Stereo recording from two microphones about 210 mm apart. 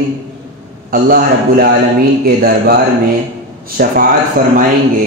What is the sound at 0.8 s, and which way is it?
A man's voice, 45° right (ahead or behind).